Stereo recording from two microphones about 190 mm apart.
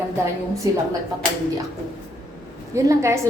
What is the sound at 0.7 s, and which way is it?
Speech, 20° right (ahead or behind).